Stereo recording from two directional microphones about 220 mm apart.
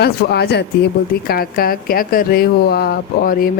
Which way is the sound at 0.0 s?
45° left (ahead or behind).